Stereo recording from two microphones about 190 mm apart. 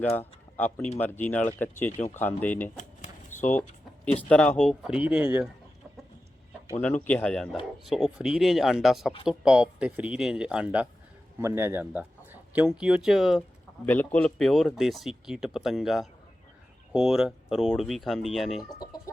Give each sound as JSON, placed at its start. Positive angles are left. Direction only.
{"t": 0.2, "sound": "speech", "side_deg": 10}
{"t": 2.7, "sound": "a sound", "side_deg": 40}
{"t": 3.5, "sound": "a sound", "side_deg": 5}
{"t": 4.2, "sound": "speech", "side_deg": 5}
{"t": 7.1, "sound": "speech", "side_deg": 5}
{"t": 13.8, "sound": "speech", "side_deg": 10}
{"t": 18.7, "sound": "speech", "side_deg": 20}